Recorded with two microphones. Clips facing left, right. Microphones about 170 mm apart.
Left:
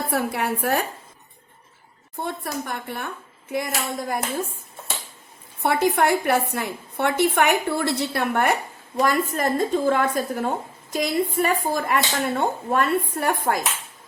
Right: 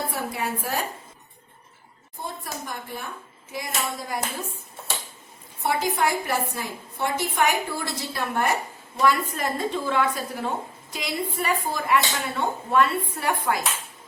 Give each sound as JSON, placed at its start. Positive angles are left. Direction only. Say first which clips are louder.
{"t": 0.1, "sound": "a woman's voice", "louder": "left 5 dB", "side_deg": 65}
{"t": 2.1, "sound": "a woman's voice", "louder": "left 6 dB", "side_deg": 65}
{"t": 5.6, "sound": "a woman's voice", "louder": "left 4 dB", "side_deg": 65}
{"t": 9.0, "sound": "speech", "louder": "left 1 dB", "side_deg": 45}